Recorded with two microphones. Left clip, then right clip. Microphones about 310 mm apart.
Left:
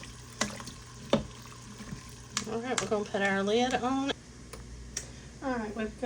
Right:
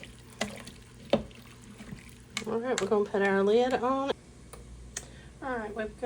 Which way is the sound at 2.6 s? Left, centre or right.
Centre.